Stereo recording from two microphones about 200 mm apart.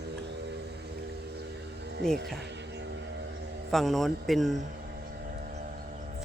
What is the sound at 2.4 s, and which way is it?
Insect, 60° right (ahead or behind).